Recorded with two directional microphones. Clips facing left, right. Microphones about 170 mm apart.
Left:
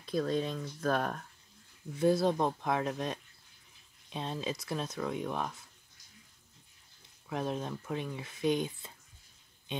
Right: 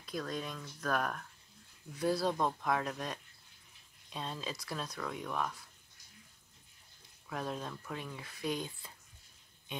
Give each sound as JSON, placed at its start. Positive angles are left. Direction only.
{"t": 0.0, "sound": "speech", "side_deg": 30}
{"t": 7.2, "sound": "speech", "side_deg": 20}